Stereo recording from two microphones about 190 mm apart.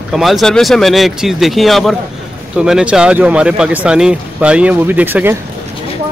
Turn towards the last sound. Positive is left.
turn(degrees=-10)  # may be behind; listen again after turning